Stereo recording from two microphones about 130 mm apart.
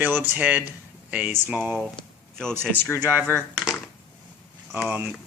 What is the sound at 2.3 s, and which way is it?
Speech, 5° left (ahead or behind).